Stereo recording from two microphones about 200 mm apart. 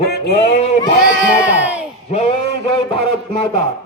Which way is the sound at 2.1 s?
30° left (ahead or behind).